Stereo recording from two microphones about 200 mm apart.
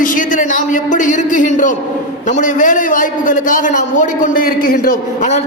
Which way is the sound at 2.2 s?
40° left (ahead or behind).